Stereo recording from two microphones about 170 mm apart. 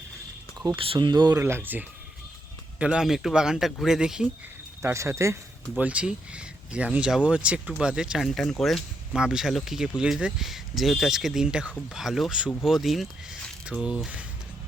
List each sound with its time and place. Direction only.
0.8 s speech: 30° right (ahead or behind)
1.4 s speech: 15° right (ahead or behind)
4.8 s speech: 15° right (ahead or behind)